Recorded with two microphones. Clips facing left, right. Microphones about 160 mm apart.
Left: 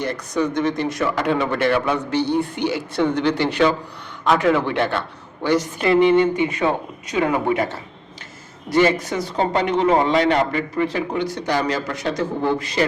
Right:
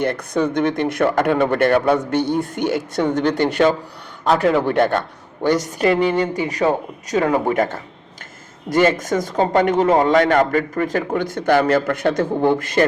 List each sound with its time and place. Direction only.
0.0 s a man's voice: 55° right (ahead or behind)